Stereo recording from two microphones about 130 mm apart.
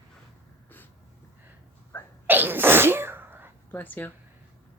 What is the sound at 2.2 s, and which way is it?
Sneeze, 15° right (ahead or behind).